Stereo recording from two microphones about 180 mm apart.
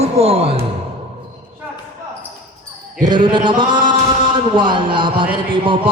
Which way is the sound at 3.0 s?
25° right (ahead or behind).